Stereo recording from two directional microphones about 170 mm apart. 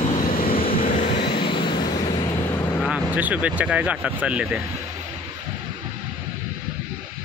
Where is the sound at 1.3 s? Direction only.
30° left (ahead or behind).